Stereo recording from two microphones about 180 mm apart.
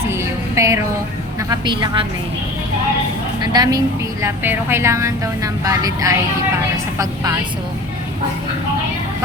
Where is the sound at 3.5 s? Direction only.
20° right (ahead or behind).